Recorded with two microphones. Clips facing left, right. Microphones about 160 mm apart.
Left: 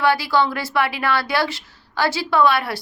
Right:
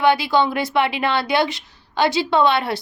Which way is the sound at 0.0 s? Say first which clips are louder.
Right 2 dB; 20° right (ahead or behind).